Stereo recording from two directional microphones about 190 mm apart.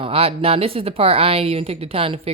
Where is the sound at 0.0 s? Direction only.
30° right (ahead or behind).